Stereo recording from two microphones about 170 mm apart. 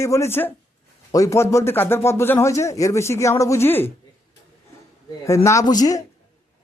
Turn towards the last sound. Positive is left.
turn(degrees=20)  # may be behind; listen again after turning